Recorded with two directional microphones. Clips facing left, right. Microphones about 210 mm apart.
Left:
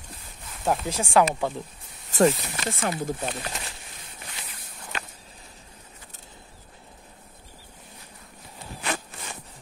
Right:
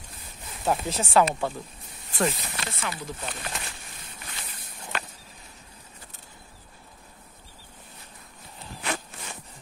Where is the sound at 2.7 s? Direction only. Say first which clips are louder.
Left 9 dB; 50° left (ahead or behind).